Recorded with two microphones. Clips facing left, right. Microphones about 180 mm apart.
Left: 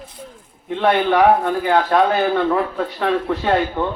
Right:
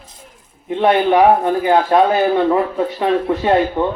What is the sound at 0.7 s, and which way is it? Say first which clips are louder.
Speech: right 3 dB; 20° right (ahead or behind).